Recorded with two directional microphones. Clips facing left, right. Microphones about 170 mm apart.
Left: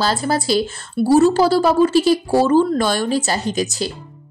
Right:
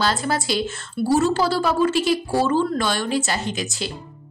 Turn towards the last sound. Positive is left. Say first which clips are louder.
# left 6 dB
turn(degrees=40)  # may be behind; listen again after turning